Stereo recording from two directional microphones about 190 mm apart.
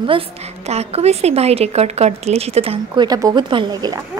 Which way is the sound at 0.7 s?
35° right (ahead or behind).